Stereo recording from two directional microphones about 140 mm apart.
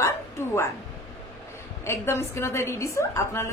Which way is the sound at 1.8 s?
20° left (ahead or behind).